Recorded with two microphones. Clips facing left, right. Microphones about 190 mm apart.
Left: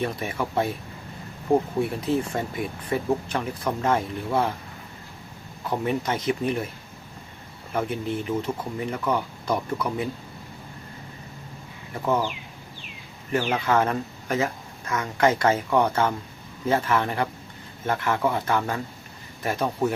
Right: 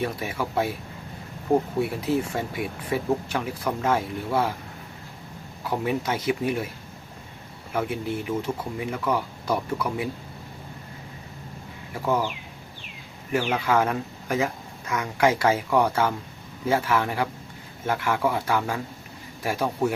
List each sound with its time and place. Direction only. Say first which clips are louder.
0.0 s speech: left 1 dB; 5° right (ahead or behind)
1.8 s speech: even; 5° right (ahead or behind)
5.6 s speech: even; 5° right (ahead or behind)
7.7 s speech: even; 5° right (ahead or behind)
12.0 s speech: even; 10° right (ahead or behind)
13.3 s speech: even; 10° right (ahead or behind)